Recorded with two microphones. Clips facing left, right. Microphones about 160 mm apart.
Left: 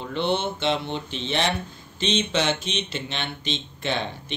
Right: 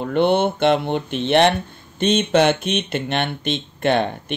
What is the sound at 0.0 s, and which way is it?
Speech, 55° right (ahead or behind).